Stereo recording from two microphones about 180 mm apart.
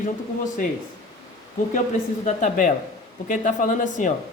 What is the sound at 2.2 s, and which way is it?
A man's voice, 45° left (ahead or behind).